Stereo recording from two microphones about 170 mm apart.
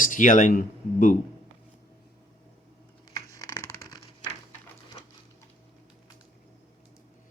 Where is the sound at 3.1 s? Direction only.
15° left (ahead or behind).